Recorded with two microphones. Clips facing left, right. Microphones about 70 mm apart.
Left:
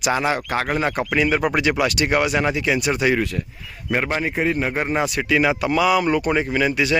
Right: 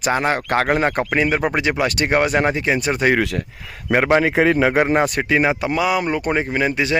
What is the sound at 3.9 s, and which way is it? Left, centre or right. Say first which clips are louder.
A man's voice: right 7 dB; right.